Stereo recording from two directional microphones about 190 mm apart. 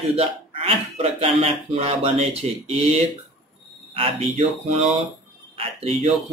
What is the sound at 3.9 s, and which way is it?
Speech, 35° right (ahead or behind).